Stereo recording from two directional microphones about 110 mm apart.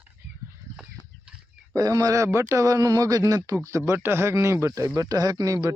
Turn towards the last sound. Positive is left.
turn(degrees=-35)  # may be behind; listen again after turning